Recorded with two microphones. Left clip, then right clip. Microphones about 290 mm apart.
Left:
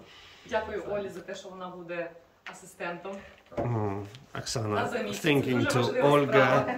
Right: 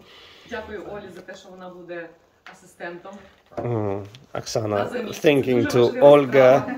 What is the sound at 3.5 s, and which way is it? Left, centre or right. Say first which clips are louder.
Speech: right 6 dB; centre.